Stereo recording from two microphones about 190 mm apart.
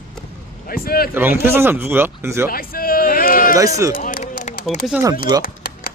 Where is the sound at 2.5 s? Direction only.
50° left (ahead or behind).